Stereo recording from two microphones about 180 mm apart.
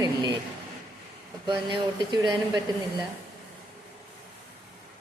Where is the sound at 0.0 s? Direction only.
20° right (ahead or behind).